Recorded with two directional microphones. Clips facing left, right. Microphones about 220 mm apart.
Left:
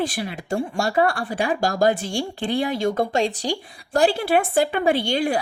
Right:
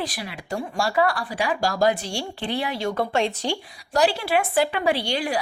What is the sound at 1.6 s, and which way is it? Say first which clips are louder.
Speech: left 1 dB; 50° left (ahead or behind).